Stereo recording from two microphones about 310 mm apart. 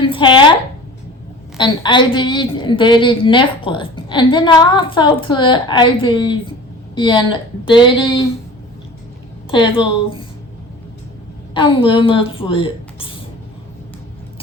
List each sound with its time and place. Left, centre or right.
0.0 s a sound: centre
1.5 s a woman's voice: centre
9.8 s a woman's voice: centre
11.5 s a woman's voice: centre